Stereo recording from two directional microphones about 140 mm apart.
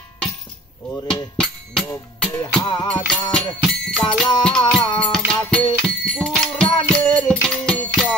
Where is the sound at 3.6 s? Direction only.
Centre (ahead or behind).